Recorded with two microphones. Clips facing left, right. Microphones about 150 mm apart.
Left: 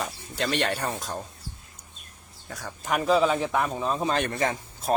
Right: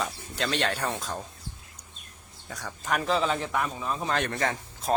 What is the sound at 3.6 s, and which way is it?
Speech, 30° left (ahead or behind).